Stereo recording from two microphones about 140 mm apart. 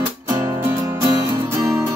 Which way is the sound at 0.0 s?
15° right (ahead or behind).